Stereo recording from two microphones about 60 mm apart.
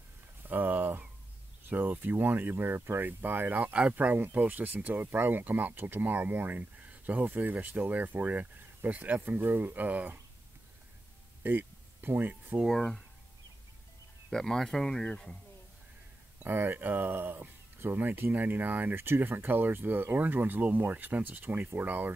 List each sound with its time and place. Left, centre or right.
0.5 s speech: right
11.4 s speech: right
12.6 s speech: centre
14.3 s speech: centre
16.4 s speech: right